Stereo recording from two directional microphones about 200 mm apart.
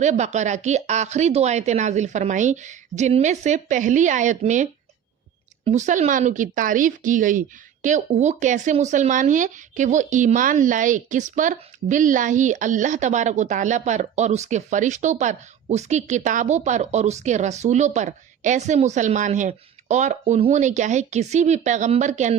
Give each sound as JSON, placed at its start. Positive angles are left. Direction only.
{"t": 0.0, "sound": "speech", "side_deg": -35}